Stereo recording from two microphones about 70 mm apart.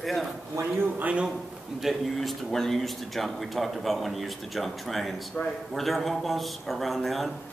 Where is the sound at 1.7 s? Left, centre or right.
Centre.